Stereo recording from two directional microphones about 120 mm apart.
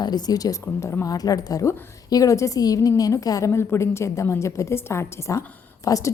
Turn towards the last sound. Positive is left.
turn(degrees=25)  # may be behind; listen again after turning